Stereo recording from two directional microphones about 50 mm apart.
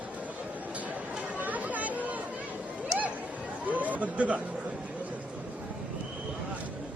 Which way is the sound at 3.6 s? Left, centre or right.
Right.